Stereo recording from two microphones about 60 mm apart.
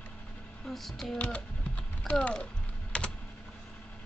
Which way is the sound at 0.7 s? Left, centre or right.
Centre.